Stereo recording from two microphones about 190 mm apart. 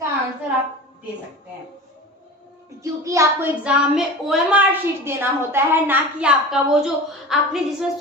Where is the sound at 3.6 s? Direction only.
5° right (ahead or behind).